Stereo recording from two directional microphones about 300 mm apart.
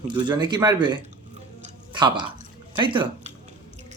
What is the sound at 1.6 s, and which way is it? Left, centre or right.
Music, centre.